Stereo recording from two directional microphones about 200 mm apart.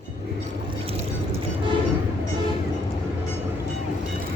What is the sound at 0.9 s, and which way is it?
Vehicle, 30° right (ahead or behind).